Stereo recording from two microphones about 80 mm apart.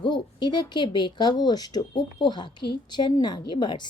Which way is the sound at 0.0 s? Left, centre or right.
Left.